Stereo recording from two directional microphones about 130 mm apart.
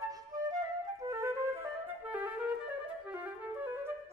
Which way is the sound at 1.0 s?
20° right (ahead or behind).